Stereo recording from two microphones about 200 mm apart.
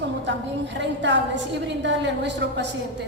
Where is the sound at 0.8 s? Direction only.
60° right (ahead or behind).